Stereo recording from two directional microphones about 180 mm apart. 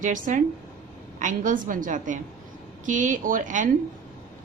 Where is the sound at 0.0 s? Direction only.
45° right (ahead or behind).